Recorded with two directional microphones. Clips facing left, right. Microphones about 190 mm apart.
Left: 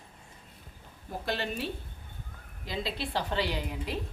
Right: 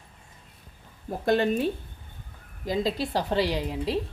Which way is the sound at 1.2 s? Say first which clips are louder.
Right 11 dB; 50° right (ahead or behind).